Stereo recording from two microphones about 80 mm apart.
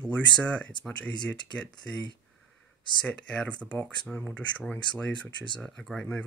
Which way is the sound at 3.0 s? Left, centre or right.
Centre.